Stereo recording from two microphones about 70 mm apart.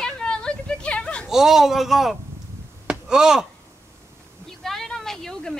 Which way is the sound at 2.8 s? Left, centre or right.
Centre.